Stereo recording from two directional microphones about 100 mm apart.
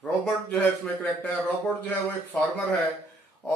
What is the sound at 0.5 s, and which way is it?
Speech, 15° left (ahead or behind).